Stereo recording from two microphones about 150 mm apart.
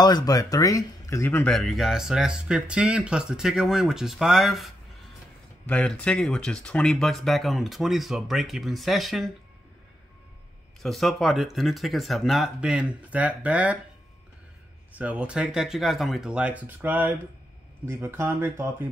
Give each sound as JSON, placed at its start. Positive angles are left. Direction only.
{"t": 0.0, "sound": "speech", "side_deg": 25}
{"t": 1.5, "sound": "speech", "side_deg": 0}
{"t": 5.7, "sound": "speech", "side_deg": 10}
{"t": 10.8, "sound": "speech", "side_deg": 0}
{"t": 15.0, "sound": "speech", "side_deg": -5}